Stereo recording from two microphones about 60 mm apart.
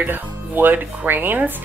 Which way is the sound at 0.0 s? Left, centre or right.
Right.